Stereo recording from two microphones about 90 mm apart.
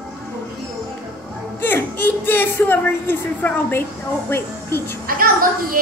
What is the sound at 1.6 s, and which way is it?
A woman's voice, 25° left (ahead or behind).